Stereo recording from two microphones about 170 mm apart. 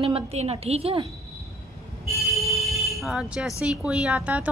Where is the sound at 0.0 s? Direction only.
35° right (ahead or behind).